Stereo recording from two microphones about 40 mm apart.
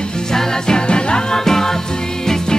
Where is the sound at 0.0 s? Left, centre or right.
Centre.